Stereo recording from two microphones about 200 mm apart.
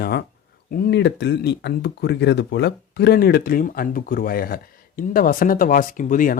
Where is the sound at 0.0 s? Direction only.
55° left (ahead or behind).